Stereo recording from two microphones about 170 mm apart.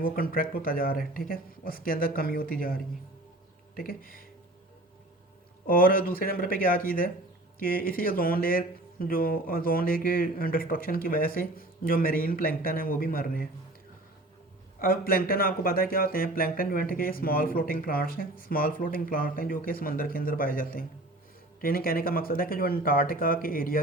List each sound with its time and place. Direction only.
0.0 s speech: 55° left (ahead or behind)
5.6 s speech: 55° left (ahead or behind)
14.8 s speech: 60° left (ahead or behind)